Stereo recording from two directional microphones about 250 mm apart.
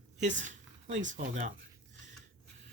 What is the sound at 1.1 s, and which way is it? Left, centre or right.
Speech, right.